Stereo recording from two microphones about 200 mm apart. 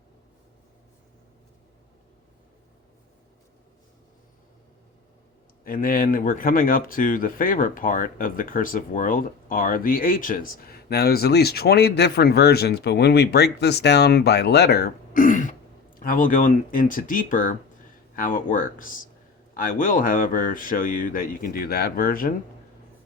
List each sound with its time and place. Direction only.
5.6 s speech: 45° left (ahead or behind)